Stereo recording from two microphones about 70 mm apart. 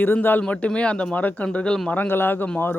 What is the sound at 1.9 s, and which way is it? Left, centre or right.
Speech, left.